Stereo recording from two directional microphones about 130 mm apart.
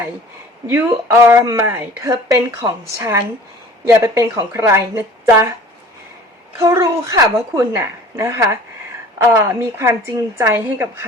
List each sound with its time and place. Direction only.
0.7 s speech: 20° right (ahead or behind)
6.6 s speech: 25° right (ahead or behind)